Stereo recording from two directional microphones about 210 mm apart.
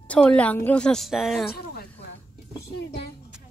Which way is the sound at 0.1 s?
5° left (ahead or behind).